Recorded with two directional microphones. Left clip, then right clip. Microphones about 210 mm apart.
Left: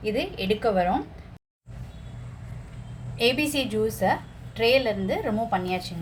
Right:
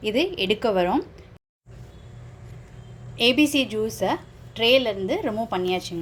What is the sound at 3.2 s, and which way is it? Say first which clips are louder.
A woman's voice: right 4 dB; 40° right (ahead or behind).